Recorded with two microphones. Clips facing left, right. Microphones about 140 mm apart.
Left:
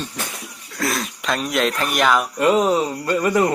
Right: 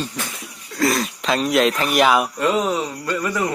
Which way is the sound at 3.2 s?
25° left (ahead or behind).